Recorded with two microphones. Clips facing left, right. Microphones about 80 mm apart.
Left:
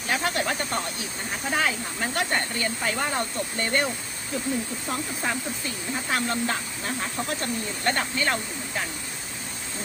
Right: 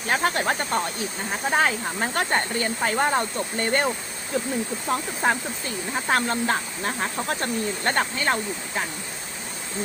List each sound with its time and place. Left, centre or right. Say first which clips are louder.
0.1 s speech: right 3 dB; right
4.9 s speech: right 7 dB; right